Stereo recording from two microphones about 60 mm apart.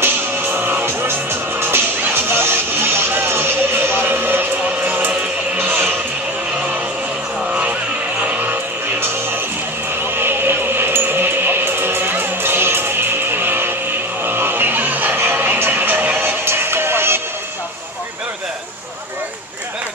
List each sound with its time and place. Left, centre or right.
0.0 s music: right
8.2 s a sound: right
10.1 s music: right